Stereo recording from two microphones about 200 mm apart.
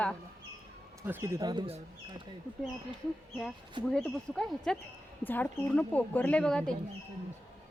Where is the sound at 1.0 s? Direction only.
10° right (ahead or behind).